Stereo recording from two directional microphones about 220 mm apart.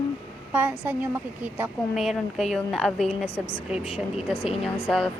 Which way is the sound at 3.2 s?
25° left (ahead or behind).